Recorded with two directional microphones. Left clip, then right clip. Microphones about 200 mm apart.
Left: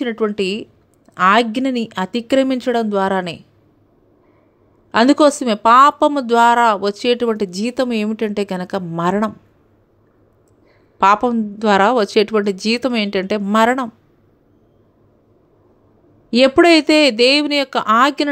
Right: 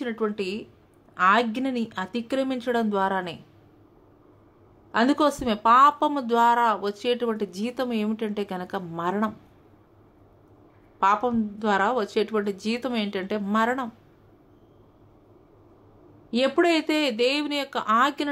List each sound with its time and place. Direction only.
0.0 s speech: 35° left (ahead or behind)
4.9 s speech: 35° left (ahead or behind)
11.0 s speech: 35° left (ahead or behind)
16.3 s speech: 35° left (ahead or behind)